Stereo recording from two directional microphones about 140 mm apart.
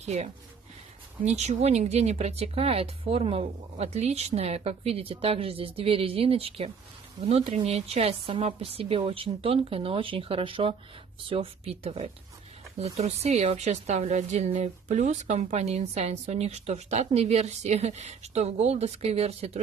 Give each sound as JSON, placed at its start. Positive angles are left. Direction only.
{"t": 0.0, "sound": "a woman's voice", "side_deg": -50}